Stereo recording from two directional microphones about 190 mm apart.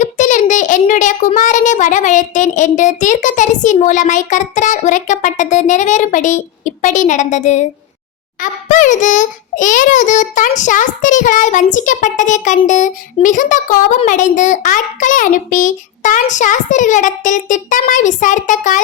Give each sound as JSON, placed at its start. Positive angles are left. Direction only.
{"t": 0.0, "sound": "a child's voice", "side_deg": 40}